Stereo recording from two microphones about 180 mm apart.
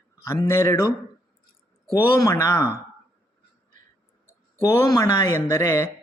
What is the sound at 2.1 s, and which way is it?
Speech, 15° left (ahead or behind).